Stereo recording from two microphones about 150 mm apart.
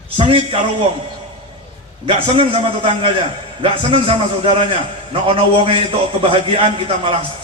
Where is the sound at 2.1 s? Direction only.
40° right (ahead or behind).